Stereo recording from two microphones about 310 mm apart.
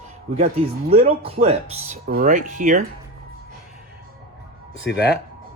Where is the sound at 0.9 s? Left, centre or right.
Centre.